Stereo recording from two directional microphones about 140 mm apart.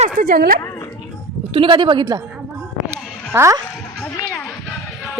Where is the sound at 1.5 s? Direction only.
40° right (ahead or behind).